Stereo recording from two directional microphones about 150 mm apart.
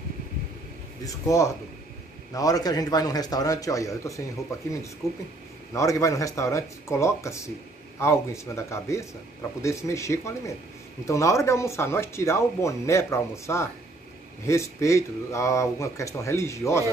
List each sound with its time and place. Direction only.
1.0 s speech: 20° left (ahead or behind)